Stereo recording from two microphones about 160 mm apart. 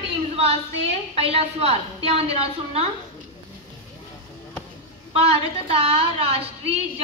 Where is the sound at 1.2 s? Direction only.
40° right (ahead or behind).